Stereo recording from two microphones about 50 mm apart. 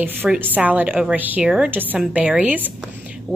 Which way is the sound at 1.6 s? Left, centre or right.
Right.